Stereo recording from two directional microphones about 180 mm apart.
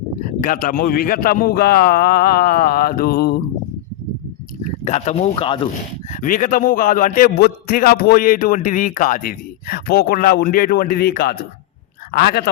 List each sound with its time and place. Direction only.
0.4 s a man's voice: 50° left (ahead or behind)
4.6 s speech: 40° left (ahead or behind)
6.1 s a man's voice: 45° left (ahead or behind); by 12.5 s 60° left (ahead or behind)